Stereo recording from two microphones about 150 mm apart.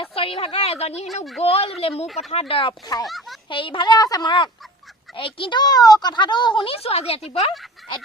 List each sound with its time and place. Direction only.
0.0 s a woman's voice: 40° left (ahead or behind)
1.0 s speech: centre (ahead or behind)
1.4 s speech: 45° left (ahead or behind); by 3.1 s 25° left (ahead or behind)
3.1 s speech: centre (ahead or behind)
3.5 s speech: 35° left (ahead or behind)